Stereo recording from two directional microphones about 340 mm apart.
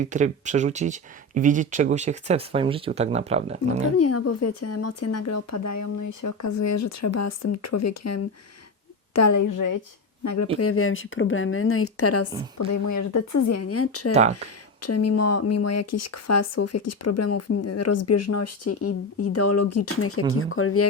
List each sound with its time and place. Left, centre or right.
0.0 s speech: right
3.9 s a woman's voice: left
10.2 s speech: left
10.6 s speech: left
12.5 s speech: left
14.1 s speech: centre
14.8 s speech: left